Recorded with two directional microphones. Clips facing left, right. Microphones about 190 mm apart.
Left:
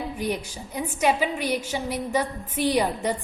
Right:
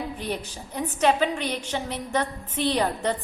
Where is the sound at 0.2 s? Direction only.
10° left (ahead or behind).